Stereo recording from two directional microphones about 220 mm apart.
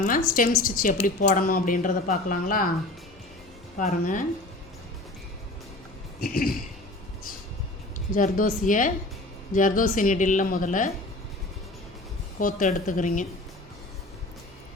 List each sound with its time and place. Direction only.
0.0 s speech: 40° left (ahead or behind)
3.8 s speech: 35° left (ahead or behind)
6.1 s a sound: 40° left (ahead or behind)
8.1 s speech: 40° left (ahead or behind)
12.4 s speech: 35° left (ahead or behind)